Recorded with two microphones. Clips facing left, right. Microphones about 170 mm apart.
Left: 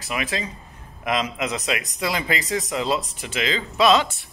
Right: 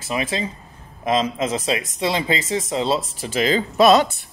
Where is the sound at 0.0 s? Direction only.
30° right (ahead or behind); by 4.1 s 45° right (ahead or behind).